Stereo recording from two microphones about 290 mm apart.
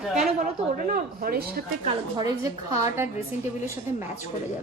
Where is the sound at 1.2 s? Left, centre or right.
Right.